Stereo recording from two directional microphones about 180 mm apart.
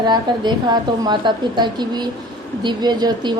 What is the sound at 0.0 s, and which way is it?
A woman's voice, 25° right (ahead or behind).